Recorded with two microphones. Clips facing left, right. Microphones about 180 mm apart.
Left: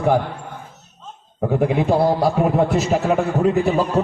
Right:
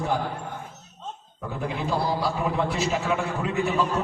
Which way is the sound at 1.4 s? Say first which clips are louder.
Left 12 dB; 60° left (ahead or behind).